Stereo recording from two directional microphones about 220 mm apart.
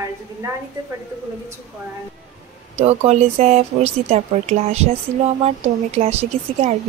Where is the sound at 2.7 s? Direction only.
30° right (ahead or behind).